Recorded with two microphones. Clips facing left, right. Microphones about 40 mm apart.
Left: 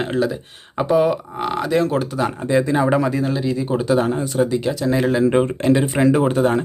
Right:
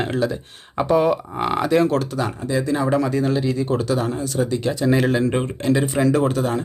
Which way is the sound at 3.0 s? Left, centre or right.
Centre.